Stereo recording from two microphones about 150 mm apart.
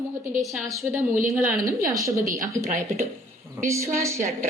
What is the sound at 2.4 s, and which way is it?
A woman's voice, 20° right (ahead or behind).